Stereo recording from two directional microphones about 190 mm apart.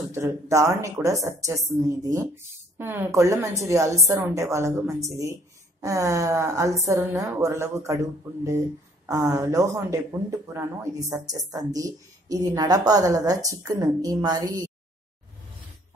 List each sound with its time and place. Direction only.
0.1 s a woman's voice: 15° right (ahead or behind)